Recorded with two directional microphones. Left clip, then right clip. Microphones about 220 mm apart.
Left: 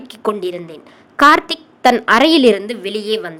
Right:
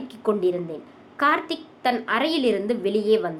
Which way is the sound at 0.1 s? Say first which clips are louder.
Left 3 dB; 45° left (ahead or behind).